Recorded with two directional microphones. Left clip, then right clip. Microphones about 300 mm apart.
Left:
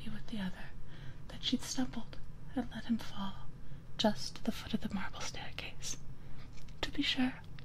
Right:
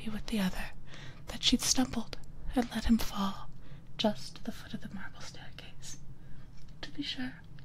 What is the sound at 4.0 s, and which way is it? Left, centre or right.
Speech, centre.